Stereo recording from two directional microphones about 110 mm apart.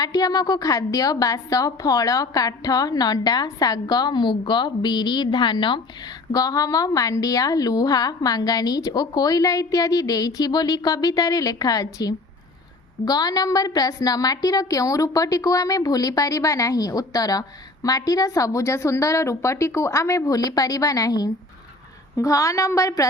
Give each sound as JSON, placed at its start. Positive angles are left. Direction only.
{"t": 0.0, "sound": "a woman's voice", "side_deg": 35}
{"t": 6.3, "sound": "a woman's voice", "side_deg": 30}